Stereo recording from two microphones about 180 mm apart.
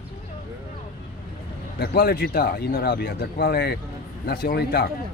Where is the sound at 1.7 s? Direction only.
60° left (ahead or behind).